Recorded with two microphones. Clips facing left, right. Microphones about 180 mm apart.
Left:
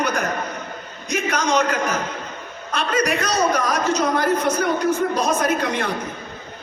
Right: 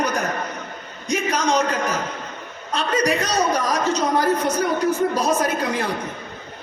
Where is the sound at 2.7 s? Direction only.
35° right (ahead or behind).